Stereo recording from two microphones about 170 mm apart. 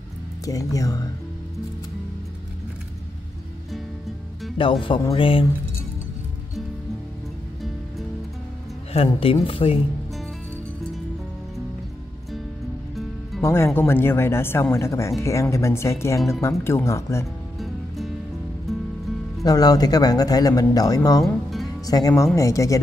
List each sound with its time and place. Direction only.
0.5 s speech: 20° left (ahead or behind)
4.6 s speech: 30° left (ahead or behind)
8.9 s speech: 35° left (ahead or behind)
13.4 s speech: 15° left (ahead or behind)
17.6 s music: centre (ahead or behind)
19.4 s speech: 20° left (ahead or behind)
21.2 s music: centre (ahead or behind)
21.8 s speech: 20° left (ahead or behind)